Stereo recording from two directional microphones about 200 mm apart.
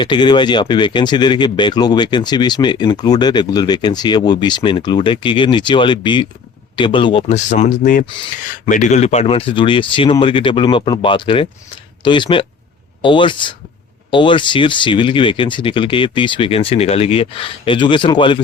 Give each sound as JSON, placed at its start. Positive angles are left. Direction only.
{"t": 0.0, "sound": "speech", "side_deg": 25}